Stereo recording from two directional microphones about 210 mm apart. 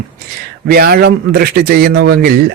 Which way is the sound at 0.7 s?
45° right (ahead or behind).